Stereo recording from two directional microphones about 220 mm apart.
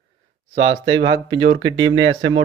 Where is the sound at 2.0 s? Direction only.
60° right (ahead or behind).